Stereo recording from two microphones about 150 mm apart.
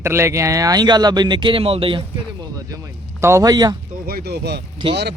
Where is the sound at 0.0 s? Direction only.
20° right (ahead or behind); by 2.0 s 40° right (ahead or behind).